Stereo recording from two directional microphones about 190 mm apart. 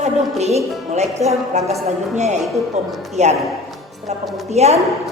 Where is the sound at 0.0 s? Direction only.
35° right (ahead or behind).